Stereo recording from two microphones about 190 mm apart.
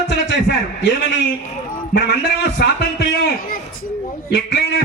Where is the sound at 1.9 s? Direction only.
65° left (ahead or behind).